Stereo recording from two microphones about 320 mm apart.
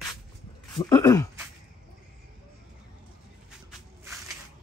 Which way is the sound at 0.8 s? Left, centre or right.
Centre.